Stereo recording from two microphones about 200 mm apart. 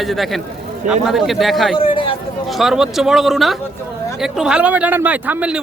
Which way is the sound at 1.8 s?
25° left (ahead or behind).